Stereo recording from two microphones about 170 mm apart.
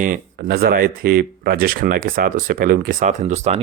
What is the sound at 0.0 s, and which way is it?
Speech, 55° right (ahead or behind).